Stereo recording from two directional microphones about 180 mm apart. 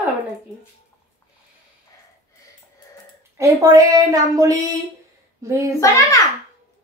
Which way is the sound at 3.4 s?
20° right (ahead or behind).